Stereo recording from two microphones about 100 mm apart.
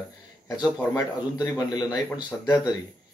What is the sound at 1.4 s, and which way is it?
A man's voice, 40° left (ahead or behind).